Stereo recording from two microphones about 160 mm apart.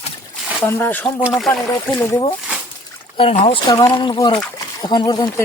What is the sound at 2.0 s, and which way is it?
Speech, 15° left (ahead or behind).